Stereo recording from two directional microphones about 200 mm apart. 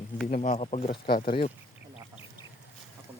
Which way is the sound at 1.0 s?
50° left (ahead or behind).